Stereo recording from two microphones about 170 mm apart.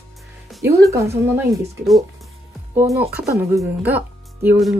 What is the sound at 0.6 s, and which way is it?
Speech, 20° right (ahead or behind).